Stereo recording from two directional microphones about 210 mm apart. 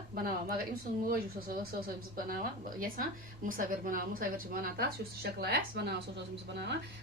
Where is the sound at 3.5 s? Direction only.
40° right (ahead or behind).